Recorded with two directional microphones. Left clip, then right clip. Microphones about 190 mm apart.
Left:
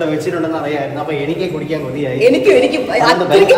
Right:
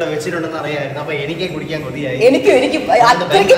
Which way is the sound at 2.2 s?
10° right (ahead or behind).